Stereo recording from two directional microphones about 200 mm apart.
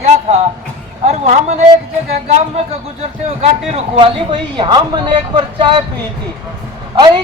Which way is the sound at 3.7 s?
25° right (ahead or behind).